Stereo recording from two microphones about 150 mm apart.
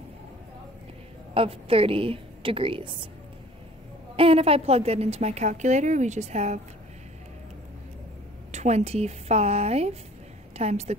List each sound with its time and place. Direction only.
1.3 s a woman's voice: 40° right (ahead or behind)
4.2 s a woman's voice: 40° right (ahead or behind)
8.5 s a woman's voice: 50° right (ahead or behind)